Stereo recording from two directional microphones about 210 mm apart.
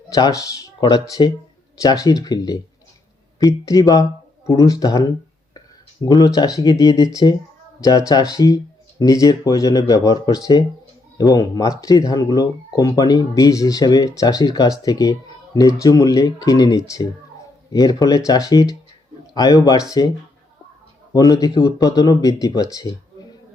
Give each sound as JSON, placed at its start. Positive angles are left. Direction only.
{"t": 0.1, "sound": "speech", "side_deg": 15}
{"t": 21.1, "sound": "speech", "side_deg": 15}